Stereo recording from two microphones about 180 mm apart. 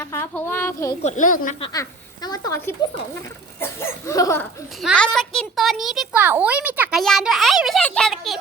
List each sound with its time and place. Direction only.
0.0 s speech: 15° left (ahead or behind)
1.0 s speech: 45° left (ahead or behind)
1.7 s speech: 20° left (ahead or behind)
4.8 s a child's voice: centre (ahead or behind)